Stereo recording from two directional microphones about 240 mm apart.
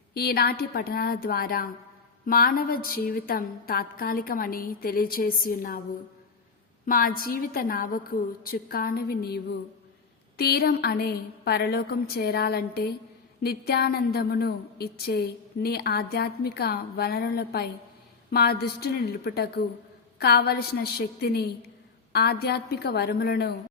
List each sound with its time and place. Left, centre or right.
0.1 s speech: left
6.8 s a woman's voice: left